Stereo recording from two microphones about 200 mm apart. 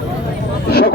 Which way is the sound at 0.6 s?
50° left (ahead or behind).